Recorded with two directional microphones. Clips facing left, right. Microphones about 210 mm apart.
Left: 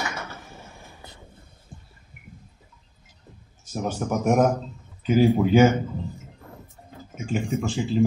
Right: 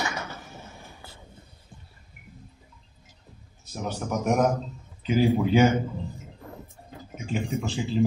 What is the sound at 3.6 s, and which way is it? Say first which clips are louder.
A man's voice: left 4 dB; 45° left (ahead or behind).